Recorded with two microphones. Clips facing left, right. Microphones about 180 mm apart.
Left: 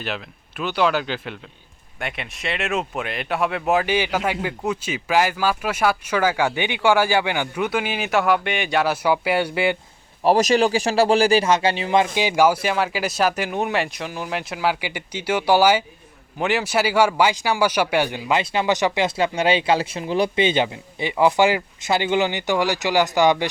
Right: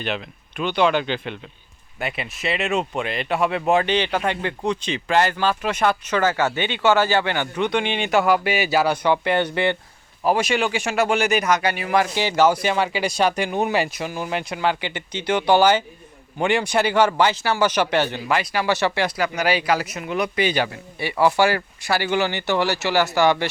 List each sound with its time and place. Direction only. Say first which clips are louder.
0.0 s speech: right 2 dB; 5° left (ahead or behind)
10.2 s speech: left 4 dB; 35° left (ahead or behind); by 23.5 s 15° left (ahead or behind)